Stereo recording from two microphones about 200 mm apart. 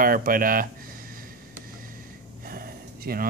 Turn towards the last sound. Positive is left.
turn(degrees=-45)  # may be behind; listen again after turning